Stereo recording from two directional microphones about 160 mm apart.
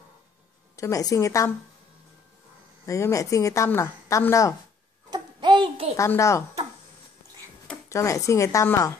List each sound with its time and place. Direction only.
0.7 s a woman's voice: 20° left (ahead or behind)
2.9 s a woman's voice: 20° left (ahead or behind)
5.1 s a sound: 30° right (ahead or behind)
5.9 s speech: 20° left (ahead or behind)
7.9 s a woman's voice: 20° left (ahead or behind)